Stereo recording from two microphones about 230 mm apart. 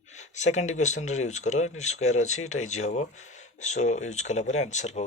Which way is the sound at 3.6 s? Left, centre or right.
Left.